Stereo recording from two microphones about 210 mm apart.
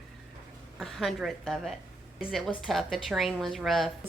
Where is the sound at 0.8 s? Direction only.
Centre (ahead or behind).